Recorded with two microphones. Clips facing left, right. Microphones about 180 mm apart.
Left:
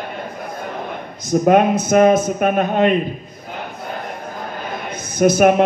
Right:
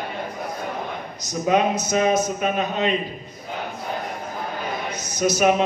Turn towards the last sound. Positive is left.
turn(degrees=55)  # may be behind; listen again after turning